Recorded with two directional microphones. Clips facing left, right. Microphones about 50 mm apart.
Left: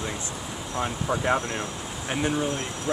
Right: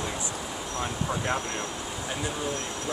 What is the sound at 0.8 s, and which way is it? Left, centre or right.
Speech, centre.